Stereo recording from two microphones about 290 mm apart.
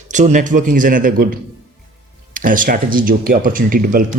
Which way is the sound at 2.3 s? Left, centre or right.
Right.